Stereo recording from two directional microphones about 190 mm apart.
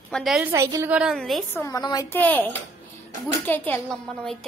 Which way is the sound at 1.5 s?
20° left (ahead or behind).